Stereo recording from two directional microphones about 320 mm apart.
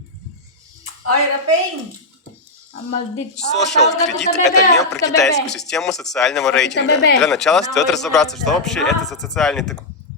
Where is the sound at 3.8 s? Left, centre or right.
Centre.